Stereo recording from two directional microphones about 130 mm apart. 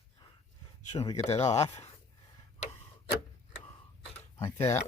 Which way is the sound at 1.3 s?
55° left (ahead or behind).